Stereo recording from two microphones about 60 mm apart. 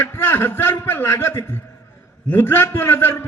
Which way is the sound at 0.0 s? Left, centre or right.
Left.